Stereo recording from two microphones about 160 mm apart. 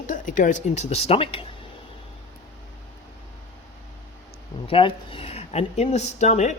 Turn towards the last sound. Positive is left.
turn(degrees=45)  # may be behind; listen again after turning